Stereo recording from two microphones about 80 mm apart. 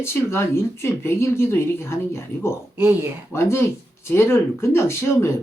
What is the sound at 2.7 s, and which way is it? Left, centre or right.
Speech, right.